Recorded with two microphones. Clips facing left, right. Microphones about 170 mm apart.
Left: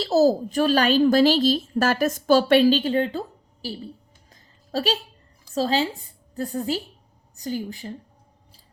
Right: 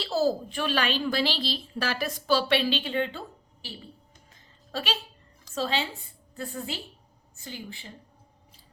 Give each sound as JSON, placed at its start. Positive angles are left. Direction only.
{"t": 0.0, "sound": "a woman's voice", "side_deg": 40}
{"t": 4.3, "sound": "music", "side_deg": 40}
{"t": 5.5, "sound": "a woman's voice", "side_deg": 35}